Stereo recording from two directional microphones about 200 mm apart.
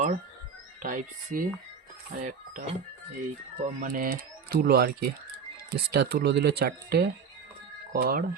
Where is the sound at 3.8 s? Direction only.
45° right (ahead or behind).